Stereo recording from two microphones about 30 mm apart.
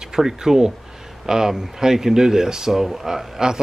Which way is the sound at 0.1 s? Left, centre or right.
Centre.